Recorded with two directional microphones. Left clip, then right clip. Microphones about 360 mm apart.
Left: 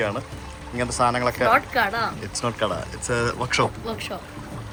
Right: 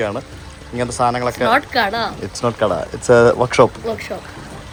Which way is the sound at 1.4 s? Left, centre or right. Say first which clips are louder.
Right 4 dB; right.